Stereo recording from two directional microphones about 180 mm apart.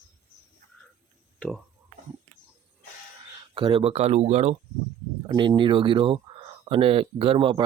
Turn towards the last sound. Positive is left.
turn(degrees=-30)  # may be behind; listen again after turning